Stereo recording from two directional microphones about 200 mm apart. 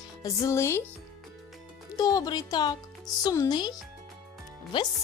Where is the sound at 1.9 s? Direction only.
20° left (ahead or behind).